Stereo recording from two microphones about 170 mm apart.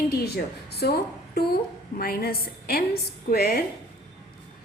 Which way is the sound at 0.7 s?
70° left (ahead or behind).